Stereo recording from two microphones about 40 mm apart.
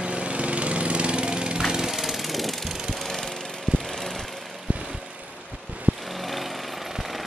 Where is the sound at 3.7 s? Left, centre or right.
Centre.